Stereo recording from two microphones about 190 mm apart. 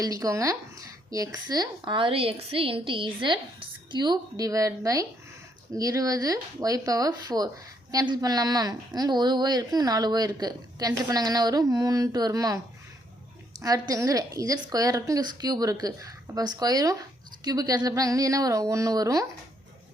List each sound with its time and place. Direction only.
0.0 s speech: 20° right (ahead or behind)
13.6 s speech: 15° right (ahead or behind)